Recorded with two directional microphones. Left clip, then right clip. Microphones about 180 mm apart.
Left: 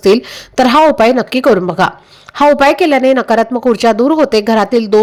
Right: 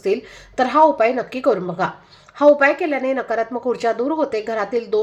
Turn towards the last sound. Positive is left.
turn(degrees=40)  # may be behind; listen again after turning